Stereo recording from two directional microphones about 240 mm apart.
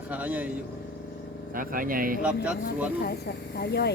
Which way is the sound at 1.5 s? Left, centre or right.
Right.